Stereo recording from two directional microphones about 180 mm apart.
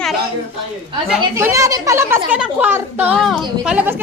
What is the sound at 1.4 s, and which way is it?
Speech, 15° right (ahead or behind).